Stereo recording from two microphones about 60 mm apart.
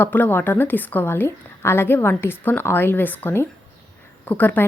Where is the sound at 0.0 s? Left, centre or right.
Left.